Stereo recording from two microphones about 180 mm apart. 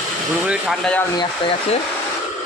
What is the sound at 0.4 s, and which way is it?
Speech, 5° right (ahead or behind).